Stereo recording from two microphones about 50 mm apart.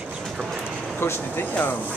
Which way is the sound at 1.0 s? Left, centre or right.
Left.